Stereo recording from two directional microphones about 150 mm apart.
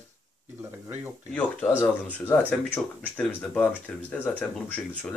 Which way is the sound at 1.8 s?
15° left (ahead or behind).